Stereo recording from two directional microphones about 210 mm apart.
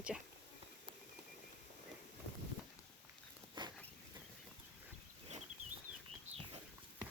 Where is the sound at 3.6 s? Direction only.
20° right (ahead or behind).